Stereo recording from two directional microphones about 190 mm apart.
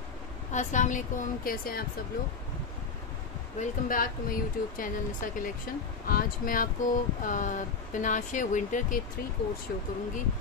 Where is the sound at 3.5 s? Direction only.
50° left (ahead or behind).